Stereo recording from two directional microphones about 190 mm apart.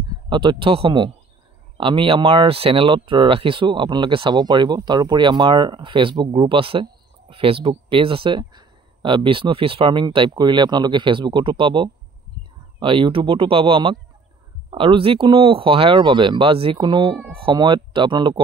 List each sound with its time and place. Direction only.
0.1 s speech: 25° right (ahead or behind)